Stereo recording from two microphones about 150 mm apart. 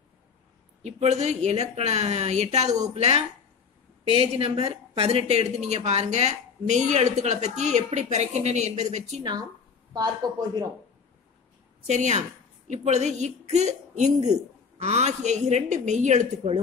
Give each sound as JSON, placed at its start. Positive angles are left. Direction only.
{"t": 0.8, "sound": "speech", "side_deg": -50}
{"t": 9.2, "sound": "a woman's voice", "side_deg": -30}
{"t": 11.8, "sound": "speech", "side_deg": -50}